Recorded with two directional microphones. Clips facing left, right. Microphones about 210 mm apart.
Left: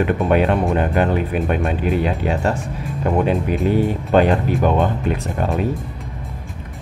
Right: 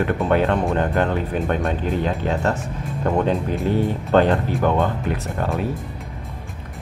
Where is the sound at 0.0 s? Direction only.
15° left (ahead or behind).